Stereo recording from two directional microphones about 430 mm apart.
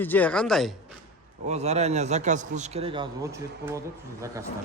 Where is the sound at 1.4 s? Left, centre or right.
Centre.